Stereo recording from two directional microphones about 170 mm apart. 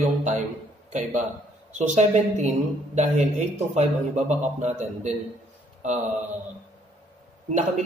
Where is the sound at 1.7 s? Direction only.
45° right (ahead or behind).